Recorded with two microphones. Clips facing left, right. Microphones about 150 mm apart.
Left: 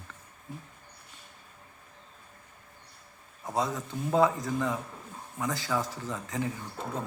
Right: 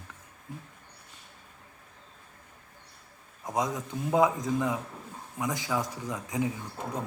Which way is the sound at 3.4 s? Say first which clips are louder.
Even; 15° right (ahead or behind).